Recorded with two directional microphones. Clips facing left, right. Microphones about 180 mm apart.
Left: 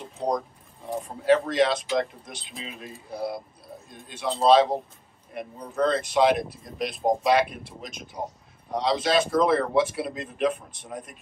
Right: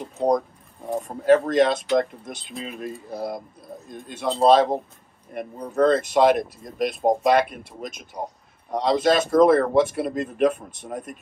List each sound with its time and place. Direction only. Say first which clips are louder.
1.0 s speech: right 4 dB; 45° right (ahead or behind)